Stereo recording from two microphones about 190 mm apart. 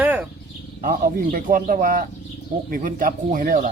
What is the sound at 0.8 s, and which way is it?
Speech, 45° right (ahead or behind).